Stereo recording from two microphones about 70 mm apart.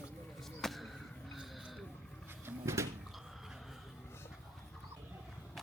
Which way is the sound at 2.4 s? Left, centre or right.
Right.